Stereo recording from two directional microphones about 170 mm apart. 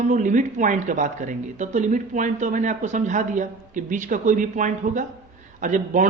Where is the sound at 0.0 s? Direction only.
45° right (ahead or behind).